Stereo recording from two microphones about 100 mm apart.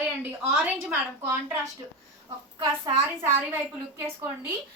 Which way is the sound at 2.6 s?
30° right (ahead or behind).